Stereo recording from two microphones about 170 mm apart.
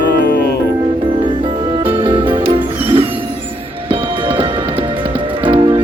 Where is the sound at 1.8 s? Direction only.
30° right (ahead or behind).